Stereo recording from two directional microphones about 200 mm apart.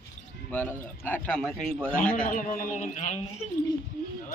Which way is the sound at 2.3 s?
40° left (ahead or behind).